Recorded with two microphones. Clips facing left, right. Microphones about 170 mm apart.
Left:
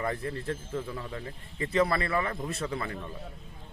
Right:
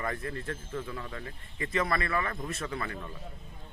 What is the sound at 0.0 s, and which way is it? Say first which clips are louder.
Speech: left 3 dB; 25° left (ahead or behind).